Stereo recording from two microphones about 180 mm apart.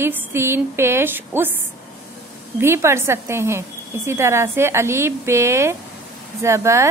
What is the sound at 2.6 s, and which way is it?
Speech, 15° right (ahead or behind).